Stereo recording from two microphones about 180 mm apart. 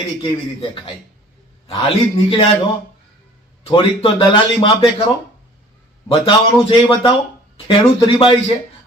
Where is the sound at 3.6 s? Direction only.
30° left (ahead or behind).